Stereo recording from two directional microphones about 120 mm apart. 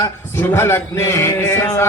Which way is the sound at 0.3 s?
20° left (ahead or behind).